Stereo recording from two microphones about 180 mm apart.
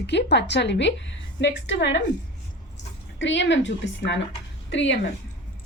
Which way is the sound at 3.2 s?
90° left.